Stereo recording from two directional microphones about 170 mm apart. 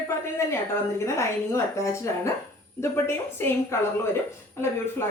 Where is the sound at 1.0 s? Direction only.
15° left (ahead or behind).